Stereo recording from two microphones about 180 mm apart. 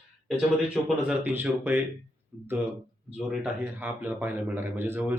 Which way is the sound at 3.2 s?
Centre (ahead or behind).